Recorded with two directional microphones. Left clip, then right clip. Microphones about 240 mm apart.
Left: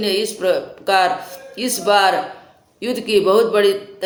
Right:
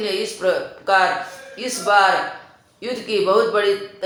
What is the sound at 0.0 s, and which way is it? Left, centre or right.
Speech, left.